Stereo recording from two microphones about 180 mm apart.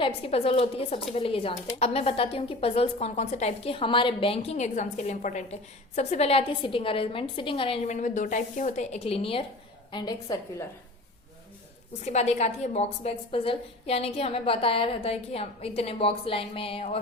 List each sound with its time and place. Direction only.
0.0 s a woman's voice: 30° left (ahead or behind)
12.0 s speech: 40° left (ahead or behind)